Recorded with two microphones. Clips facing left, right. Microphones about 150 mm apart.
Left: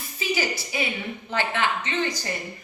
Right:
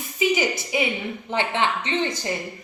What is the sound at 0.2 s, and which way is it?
A woman's voice, 20° right (ahead or behind).